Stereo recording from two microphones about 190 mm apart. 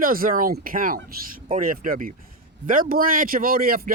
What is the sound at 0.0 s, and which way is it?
Speech, 50° right (ahead or behind).